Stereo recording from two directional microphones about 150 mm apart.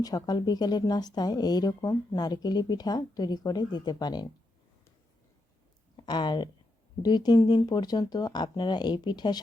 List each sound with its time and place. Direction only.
0.0 s speech: 25° left (ahead or behind)
6.1 s speech: 30° left (ahead or behind)